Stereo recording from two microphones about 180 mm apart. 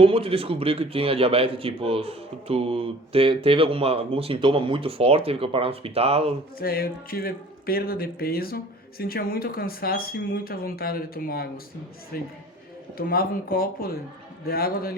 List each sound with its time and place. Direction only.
0.0 s a man's voice: 30° right (ahead or behind)
6.6 s speech: 55° left (ahead or behind)